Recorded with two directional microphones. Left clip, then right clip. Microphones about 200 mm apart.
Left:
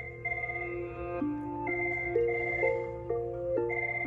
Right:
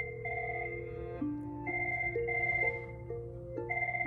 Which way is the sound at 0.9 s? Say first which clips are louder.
Left 4 dB; 25° left (ahead or behind).